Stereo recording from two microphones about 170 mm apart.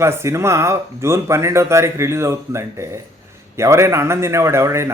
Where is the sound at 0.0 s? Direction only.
15° right (ahead or behind).